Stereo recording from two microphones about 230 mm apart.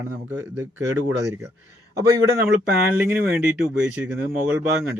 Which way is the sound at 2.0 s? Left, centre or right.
Centre.